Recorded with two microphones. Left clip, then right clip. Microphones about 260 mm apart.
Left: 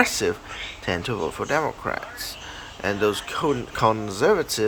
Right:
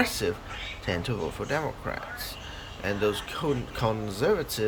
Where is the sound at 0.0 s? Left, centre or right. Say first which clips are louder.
Left 6 dB; centre.